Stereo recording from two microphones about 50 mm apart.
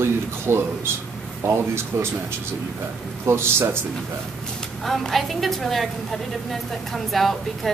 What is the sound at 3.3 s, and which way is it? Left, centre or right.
Speech, right.